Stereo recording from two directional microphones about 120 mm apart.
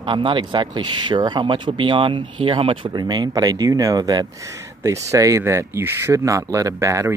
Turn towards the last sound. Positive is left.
turn(degrees=-25)  # may be behind; listen again after turning